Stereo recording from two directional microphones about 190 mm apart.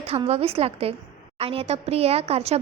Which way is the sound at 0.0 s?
35° right (ahead or behind).